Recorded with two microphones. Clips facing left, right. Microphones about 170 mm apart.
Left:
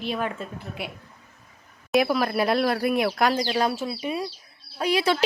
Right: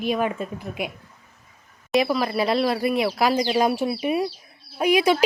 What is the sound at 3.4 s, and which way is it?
A woman's voice, 15° right (ahead or behind).